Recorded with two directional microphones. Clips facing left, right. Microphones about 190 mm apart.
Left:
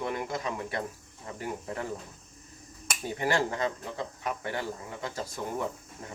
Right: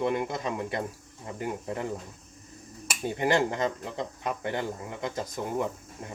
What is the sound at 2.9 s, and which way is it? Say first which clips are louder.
Speech: right 3 dB; 20° right (ahead or behind).